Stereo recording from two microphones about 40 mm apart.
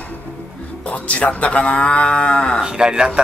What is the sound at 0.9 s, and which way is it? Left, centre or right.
Cattle, left.